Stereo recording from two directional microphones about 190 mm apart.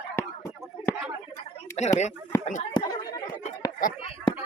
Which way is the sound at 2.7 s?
20° left (ahead or behind).